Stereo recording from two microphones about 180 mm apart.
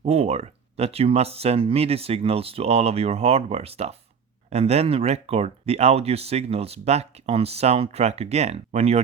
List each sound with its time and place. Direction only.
0.0 s speech: 35° right (ahead or behind)